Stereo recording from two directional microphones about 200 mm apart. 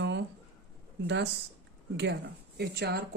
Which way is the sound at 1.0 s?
60° right (ahead or behind).